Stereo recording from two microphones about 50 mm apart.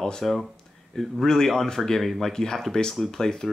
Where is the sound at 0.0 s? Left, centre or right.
Centre.